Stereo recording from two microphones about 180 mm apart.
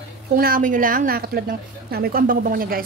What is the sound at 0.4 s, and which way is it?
A woman's voice, 50° right (ahead or behind).